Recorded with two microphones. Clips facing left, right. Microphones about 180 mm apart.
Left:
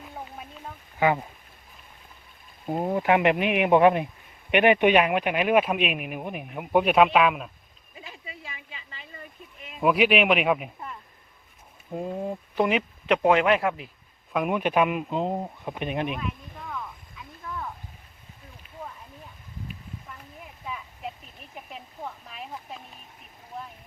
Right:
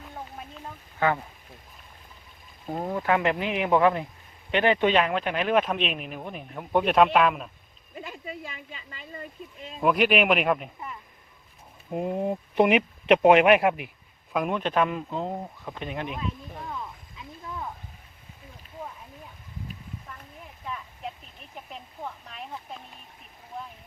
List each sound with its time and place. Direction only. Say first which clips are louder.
0.9 s speech: left 2 dB; 15° left (ahead or behind)
2.6 s speech: left 3 dB; 20° left (ahead or behind); by 7.5 s centre (ahead or behind)
7.9 s speech: right 6 dB; 50° right (ahead or behind)
9.8 s speech: left 1 dB; centre (ahead or behind)
11.9 s speech: right 3 dB; 20° right (ahead or behind)
14.3 s speech: left 2 dB; 5° left (ahead or behind)
16.7 s a sound: even; 25° right (ahead or behind)
20.7 s a sound: even; 5° left (ahead or behind)
23.5 s vehicle: even; centre (ahead or behind)